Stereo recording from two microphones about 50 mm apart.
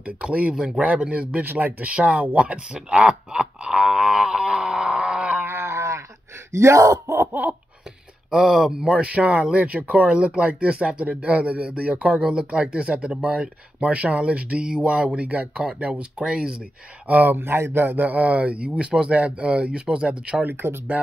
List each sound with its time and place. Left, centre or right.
0.0 s speech: right
0.6 s speech: centre
1.4 s speech: right
1.9 s speech: right
2.2 s a sound: right
5.4 s a sound: right
6.5 s gasp: right
8.3 s speech: centre
17.1 s speech: right
20.4 s speech: right